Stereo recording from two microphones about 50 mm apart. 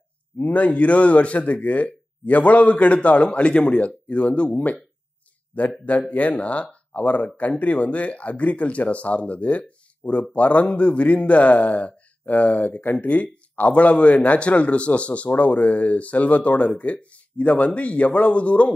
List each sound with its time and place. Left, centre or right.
0.4 s speech: left
5.9 s speech: left